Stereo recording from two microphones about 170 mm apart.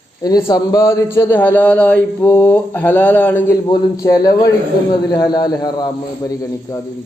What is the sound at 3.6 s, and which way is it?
A man's voice, 25° left (ahead or behind).